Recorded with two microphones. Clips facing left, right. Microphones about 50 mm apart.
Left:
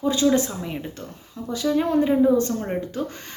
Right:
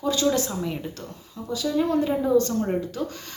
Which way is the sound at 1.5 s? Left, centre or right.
Left.